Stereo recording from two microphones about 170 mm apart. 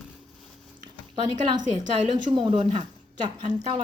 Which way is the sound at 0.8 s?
25° right (ahead or behind).